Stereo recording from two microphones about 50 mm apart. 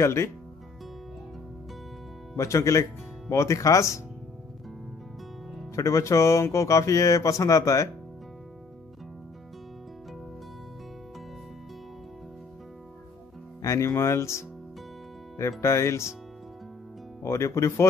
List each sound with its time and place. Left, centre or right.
0.0 s speech: left
2.3 s speech: left
5.8 s speech: left
13.6 s speech: left
15.6 s speech: left
17.2 s speech: left